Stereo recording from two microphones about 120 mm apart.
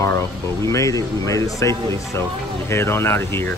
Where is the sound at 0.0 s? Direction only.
25° left (ahead or behind).